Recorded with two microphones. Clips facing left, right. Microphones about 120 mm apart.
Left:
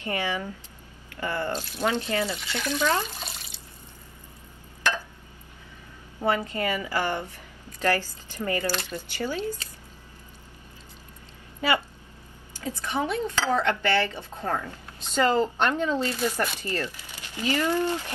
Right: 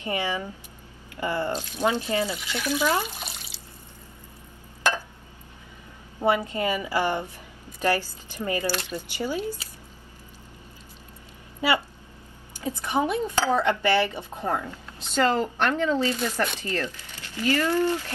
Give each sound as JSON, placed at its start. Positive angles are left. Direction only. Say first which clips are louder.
{"t": 0.0, "sound": "dishes", "louder": "right 1 dB", "side_deg": -15}
{"t": 2.2, "sound": "speech", "louder": "right 1 dB", "side_deg": 0}
{"t": 6.2, "sound": "dishes", "louder": "right 2 dB", "side_deg": -20}
{"t": 12.5, "sound": "dishes", "louder": "right 3 dB", "side_deg": -15}
{"t": 15.1, "sound": "speech", "louder": "even", "side_deg": 15}